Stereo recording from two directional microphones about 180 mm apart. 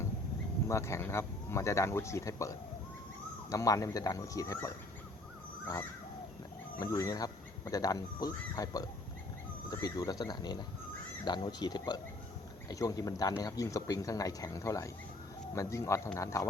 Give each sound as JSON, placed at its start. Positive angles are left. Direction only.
{"t": 0.7, "sound": "speech", "side_deg": 15}
{"t": 3.5, "sound": "speech", "side_deg": 20}
{"t": 6.7, "sound": "speech", "side_deg": 20}